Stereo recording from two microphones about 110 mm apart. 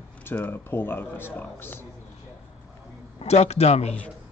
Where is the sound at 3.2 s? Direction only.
70° left (ahead or behind).